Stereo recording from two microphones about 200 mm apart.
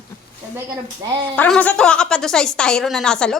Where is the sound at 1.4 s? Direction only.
5° left (ahead or behind).